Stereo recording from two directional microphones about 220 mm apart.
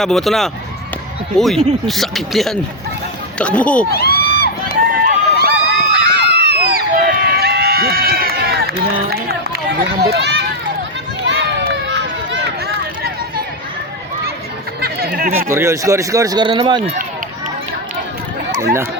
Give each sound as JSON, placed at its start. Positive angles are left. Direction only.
{"t": 0.0, "sound": "speech", "side_deg": 0}
{"t": 3.9, "sound": "crowd", "side_deg": 45}
{"t": 4.9, "sound": "run", "side_deg": -40}
{"t": 5.9, "sound": "run", "side_deg": -50}
{"t": 10.0, "sound": "speech", "side_deg": -50}
{"t": 11.2, "sound": "run", "side_deg": -50}
{"t": 14.8, "sound": "music", "side_deg": -45}
{"t": 15.3, "sound": "speech", "side_deg": -10}
{"t": 18.6, "sound": "speech", "side_deg": -10}